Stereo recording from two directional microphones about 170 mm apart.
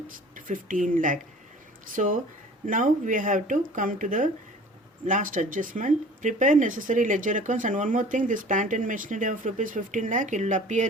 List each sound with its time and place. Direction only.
0.3 s speech: 50° right (ahead or behind)